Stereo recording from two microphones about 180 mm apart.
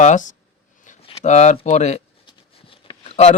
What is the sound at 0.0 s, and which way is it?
Speech, 45° left (ahead or behind).